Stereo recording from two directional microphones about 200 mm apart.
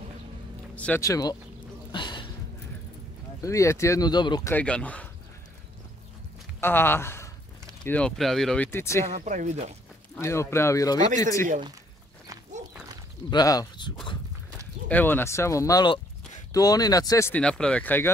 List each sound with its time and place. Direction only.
0.7 s speech: 10° left (ahead or behind)
1.9 s a sound: 25° left (ahead or behind)
3.3 s speech: 15° left (ahead or behind)
4.6 s speech: 5° left (ahead or behind)
6.6 s speech: 10° left (ahead or behind)
8.7 s speech: 15° left (ahead or behind)
9.1 s speech: 35° right (ahead or behind)
10.1 s speech: 15° left (ahead or behind)
13.3 s speech: 20° left (ahead or behind)
14.9 s speech: 10° left (ahead or behind)